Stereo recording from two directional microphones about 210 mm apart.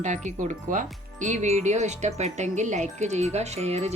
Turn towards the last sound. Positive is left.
turn(degrees=-30)  # may be behind; listen again after turning